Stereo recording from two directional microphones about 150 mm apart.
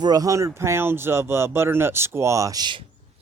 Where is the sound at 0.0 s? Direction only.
25° right (ahead or behind).